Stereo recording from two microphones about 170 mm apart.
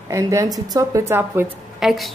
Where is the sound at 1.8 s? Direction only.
Centre (ahead or behind).